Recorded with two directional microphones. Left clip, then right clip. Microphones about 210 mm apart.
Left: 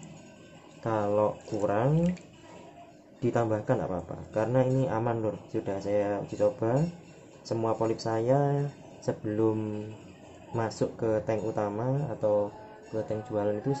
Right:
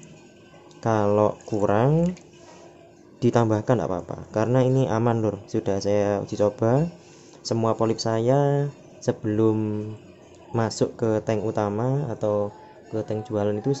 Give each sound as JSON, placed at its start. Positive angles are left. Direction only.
{"t": 0.8, "sound": "speech", "side_deg": -45}
{"t": 3.2, "sound": "speech", "side_deg": -45}